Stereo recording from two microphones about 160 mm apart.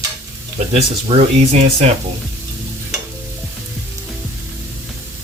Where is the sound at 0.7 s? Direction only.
40° right (ahead or behind).